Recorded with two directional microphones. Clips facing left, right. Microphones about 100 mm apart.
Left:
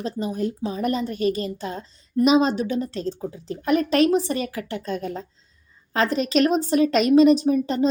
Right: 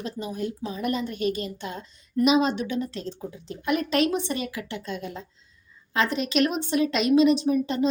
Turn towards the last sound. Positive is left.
turn(degrees=40)  # may be behind; listen again after turning